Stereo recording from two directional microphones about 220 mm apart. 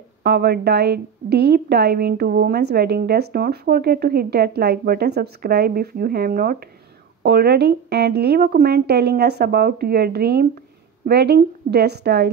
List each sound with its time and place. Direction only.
0.2 s a woman's voice: 45° right (ahead or behind)